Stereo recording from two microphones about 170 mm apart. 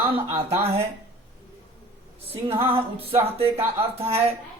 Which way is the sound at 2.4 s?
35° right (ahead or behind).